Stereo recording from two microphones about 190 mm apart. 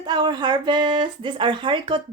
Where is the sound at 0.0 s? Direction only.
20° right (ahead or behind).